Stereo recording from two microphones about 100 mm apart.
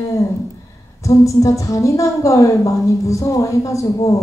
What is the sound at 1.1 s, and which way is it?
A woman's voice, 30° left (ahead or behind).